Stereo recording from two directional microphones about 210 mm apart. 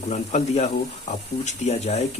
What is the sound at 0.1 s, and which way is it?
Speech, 30° left (ahead or behind).